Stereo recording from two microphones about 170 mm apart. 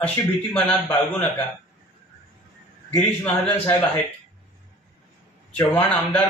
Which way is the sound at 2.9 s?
10° left (ahead or behind).